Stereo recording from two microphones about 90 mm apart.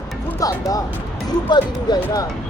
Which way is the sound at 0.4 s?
40° left (ahead or behind).